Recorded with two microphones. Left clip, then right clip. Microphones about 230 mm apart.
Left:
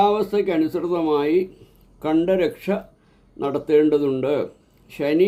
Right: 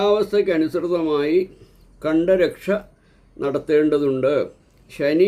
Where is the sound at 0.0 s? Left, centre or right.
Centre.